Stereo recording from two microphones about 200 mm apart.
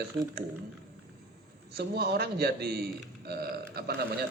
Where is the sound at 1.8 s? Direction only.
55° right (ahead or behind).